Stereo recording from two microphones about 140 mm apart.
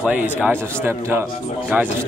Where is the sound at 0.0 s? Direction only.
10° right (ahead or behind).